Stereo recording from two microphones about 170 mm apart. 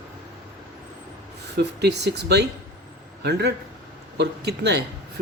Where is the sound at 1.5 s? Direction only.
80° right.